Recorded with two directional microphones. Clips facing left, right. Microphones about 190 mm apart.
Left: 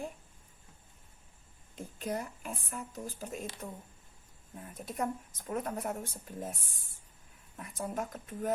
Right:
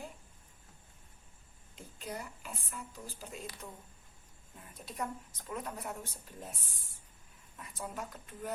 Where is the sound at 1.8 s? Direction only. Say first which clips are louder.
Left 7 dB; 55° left (ahead or behind).